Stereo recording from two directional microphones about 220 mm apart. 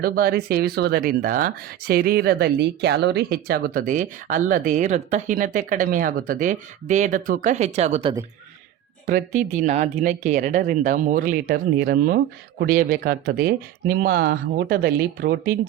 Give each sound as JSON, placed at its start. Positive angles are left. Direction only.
{"t": 0.0, "sound": "speech", "side_deg": -45}